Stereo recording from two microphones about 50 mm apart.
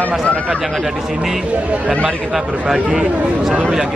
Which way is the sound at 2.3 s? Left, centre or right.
Centre.